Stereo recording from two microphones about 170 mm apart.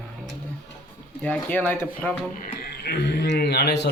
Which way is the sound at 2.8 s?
75° left (ahead or behind).